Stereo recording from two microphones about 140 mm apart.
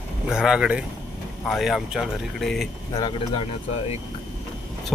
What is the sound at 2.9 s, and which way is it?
Speech, 35° left (ahead or behind).